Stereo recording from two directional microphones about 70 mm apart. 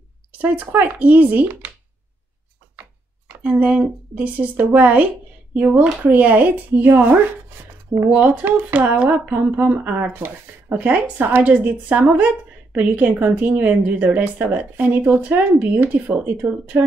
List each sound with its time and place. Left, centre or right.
0.4 s speech: right
3.4 s speech: right